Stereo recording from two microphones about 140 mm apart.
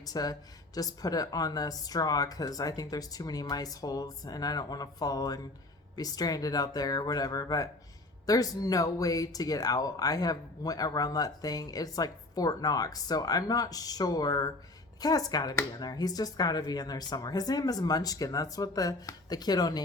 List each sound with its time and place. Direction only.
0.0 s speech: 25° left (ahead or behind)